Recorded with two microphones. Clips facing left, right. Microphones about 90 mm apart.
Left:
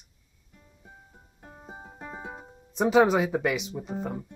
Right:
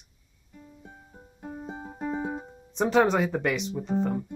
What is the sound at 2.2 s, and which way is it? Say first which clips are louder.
Speech: right 7 dB; centre (ahead or behind).